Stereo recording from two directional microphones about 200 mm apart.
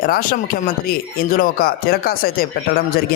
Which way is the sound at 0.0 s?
45° left (ahead or behind).